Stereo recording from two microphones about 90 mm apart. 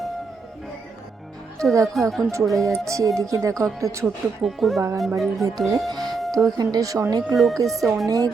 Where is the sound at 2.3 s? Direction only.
35° right (ahead or behind).